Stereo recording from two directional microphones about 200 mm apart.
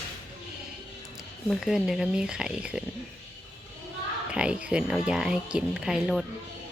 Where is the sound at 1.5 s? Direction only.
Centre (ahead or behind).